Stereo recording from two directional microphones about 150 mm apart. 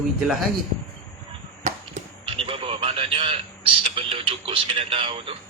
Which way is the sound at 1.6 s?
55° right (ahead or behind).